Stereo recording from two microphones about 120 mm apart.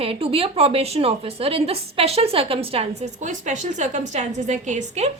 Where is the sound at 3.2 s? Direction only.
90° right.